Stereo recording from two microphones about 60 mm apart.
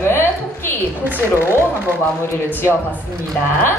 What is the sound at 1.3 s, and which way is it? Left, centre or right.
Speech, right.